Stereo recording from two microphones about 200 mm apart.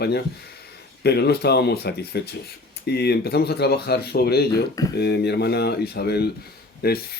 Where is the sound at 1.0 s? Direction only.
55° left (ahead or behind).